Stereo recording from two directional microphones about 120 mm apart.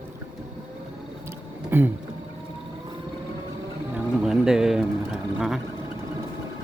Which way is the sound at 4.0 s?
5° right (ahead or behind).